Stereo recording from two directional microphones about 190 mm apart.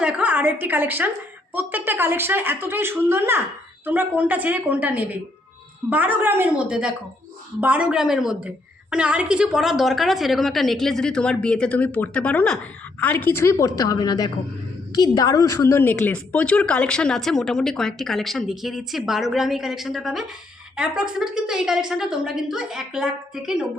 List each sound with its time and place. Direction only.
0.0 s a woman's voice: 5° right (ahead or behind)